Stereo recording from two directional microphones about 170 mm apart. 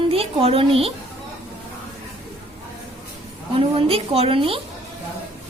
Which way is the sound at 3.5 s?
35° right (ahead or behind).